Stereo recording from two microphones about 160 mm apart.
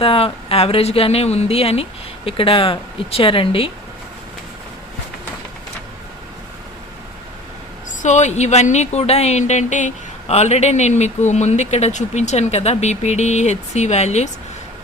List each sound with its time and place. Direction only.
0.0 s speech: 35° left (ahead or behind)
8.0 s speech: 45° left (ahead or behind)